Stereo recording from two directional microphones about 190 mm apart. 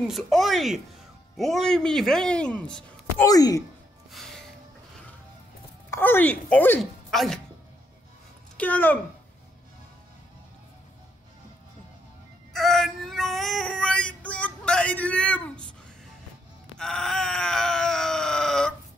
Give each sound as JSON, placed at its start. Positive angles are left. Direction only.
{"t": 0.0, "sound": "speech", "side_deg": 0}
{"t": 3.3, "sound": "speech", "side_deg": 20}
{"t": 5.9, "sound": "speech", "side_deg": 10}
{"t": 8.5, "sound": "speech", "side_deg": 10}
{"t": 12.5, "sound": "a sound", "side_deg": 0}
{"t": 16.7, "sound": "groan", "side_deg": 5}